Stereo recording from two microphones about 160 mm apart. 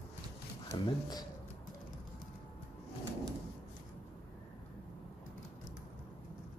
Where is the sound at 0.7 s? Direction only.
25° left (ahead or behind).